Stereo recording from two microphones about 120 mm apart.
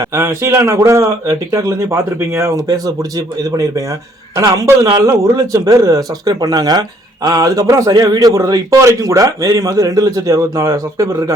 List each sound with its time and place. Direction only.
0.0 s a man's voice: 25° right (ahead or behind)